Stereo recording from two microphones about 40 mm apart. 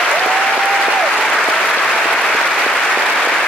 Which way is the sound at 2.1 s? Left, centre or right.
Centre.